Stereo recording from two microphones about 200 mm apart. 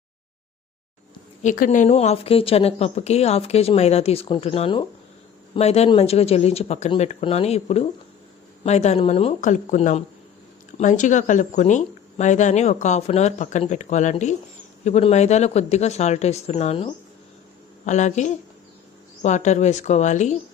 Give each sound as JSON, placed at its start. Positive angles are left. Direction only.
{"t": 1.4, "sound": "a woman's voice", "side_deg": 40}